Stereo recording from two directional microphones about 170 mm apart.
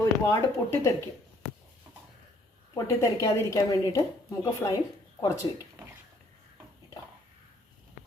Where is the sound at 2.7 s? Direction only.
20° left (ahead or behind).